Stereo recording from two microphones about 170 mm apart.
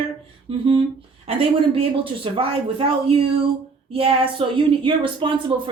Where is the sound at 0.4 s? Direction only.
30° right (ahead or behind).